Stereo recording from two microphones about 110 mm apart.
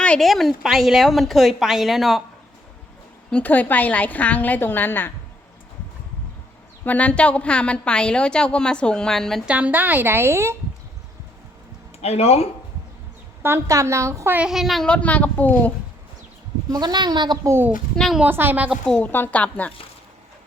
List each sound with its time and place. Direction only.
0.0 s a woman's voice: 5° left (ahead or behind)
3.2 s a woman's voice: 10° left (ahead or behind)
6.8 s a woman's voice: 15° left (ahead or behind)
9.5 s a woman's voice: 15° right (ahead or behind)
12.0 s speech: 70° left (ahead or behind)
13.4 s a woman's voice: 25° right (ahead or behind)
14.3 s a woman's voice: 5° right (ahead or behind); by 15.7 s 15° left (ahead or behind)
16.6 s speech: 35° right (ahead or behind)
17.4 s a woman's voice: 25° right (ahead or behind)
17.9 s a woman's voice: 5° left (ahead or behind)
18.2 s a woman's voice: 20° right (ahead or behind)
18.9 s a woman's voice: 15° left (ahead or behind)